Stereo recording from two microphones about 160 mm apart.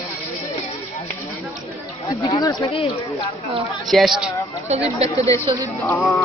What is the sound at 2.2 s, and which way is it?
Speech, 25° left (ahead or behind).